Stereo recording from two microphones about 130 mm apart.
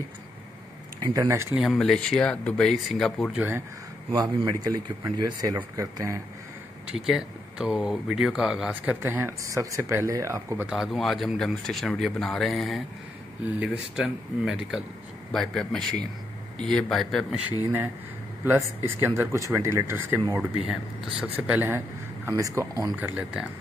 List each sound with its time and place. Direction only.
1.1 s speech: 25° right (ahead or behind)
1.5 s speech: 5° right (ahead or behind)
3.3 s a man's voice: 15° right (ahead or behind)
4.1 s speech: 30° right (ahead or behind)
6.9 s speech: 5° right (ahead or behind)
9.0 s speech: 20° right (ahead or behind)
10.7 s a man's voice: centre (ahead or behind)
18.4 s a man's voice: 15° right (ahead or behind)
20.6 s a man's voice: 5° right (ahead or behind)